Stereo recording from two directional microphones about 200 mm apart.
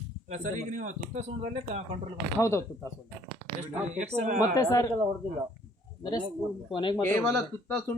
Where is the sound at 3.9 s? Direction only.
35° right (ahead or behind).